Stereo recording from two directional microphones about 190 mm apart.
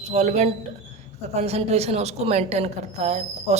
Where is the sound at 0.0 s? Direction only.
35° right (ahead or behind).